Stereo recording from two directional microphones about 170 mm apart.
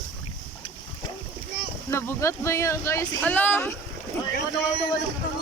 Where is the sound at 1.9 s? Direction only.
15° left (ahead or behind).